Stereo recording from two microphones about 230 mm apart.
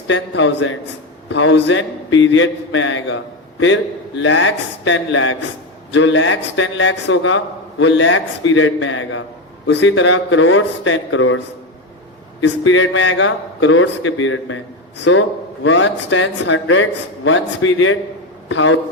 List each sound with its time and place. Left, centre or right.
0.1 s a man's voice: left
12.4 s a man's voice: left